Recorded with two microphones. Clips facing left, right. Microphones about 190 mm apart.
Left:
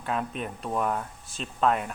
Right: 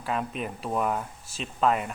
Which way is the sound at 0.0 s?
Centre (ahead or behind).